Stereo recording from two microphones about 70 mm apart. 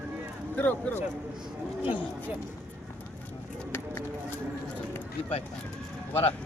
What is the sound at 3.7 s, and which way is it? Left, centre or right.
Music, left.